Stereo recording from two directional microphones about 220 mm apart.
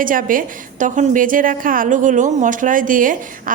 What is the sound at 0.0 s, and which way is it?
A woman's voice, 40° right (ahead or behind).